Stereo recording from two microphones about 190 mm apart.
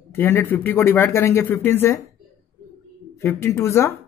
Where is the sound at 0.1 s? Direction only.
10° left (ahead or behind).